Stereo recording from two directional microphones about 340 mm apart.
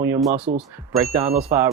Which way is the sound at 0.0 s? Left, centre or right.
Centre.